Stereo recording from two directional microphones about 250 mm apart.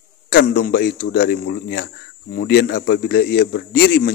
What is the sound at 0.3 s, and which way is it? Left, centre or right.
A man's voice, left.